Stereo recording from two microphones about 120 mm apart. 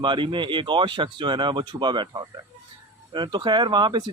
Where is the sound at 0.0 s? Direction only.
40° right (ahead or behind).